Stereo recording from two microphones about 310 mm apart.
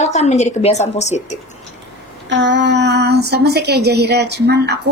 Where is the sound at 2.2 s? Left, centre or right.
Right.